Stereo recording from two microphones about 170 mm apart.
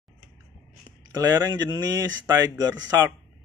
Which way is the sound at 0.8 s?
25° right (ahead or behind).